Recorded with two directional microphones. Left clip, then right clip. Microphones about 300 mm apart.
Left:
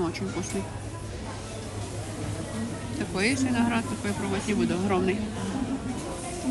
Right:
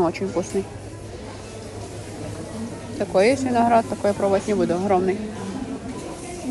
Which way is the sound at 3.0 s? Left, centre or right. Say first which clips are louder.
Right 9 dB; centre.